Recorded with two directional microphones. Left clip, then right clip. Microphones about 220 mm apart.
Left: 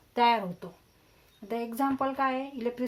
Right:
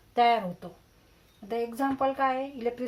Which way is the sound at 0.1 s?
40° left (ahead or behind).